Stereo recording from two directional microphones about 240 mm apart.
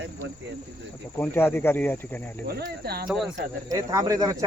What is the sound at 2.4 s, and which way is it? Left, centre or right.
Speech, right.